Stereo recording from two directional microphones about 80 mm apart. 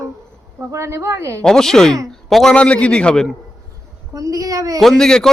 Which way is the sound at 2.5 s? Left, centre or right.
Centre.